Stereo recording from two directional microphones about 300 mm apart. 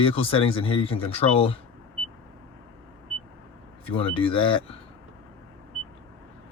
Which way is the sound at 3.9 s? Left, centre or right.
Centre.